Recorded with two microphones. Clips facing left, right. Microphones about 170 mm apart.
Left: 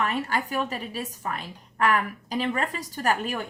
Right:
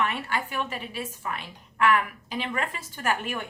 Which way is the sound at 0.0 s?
40° left (ahead or behind).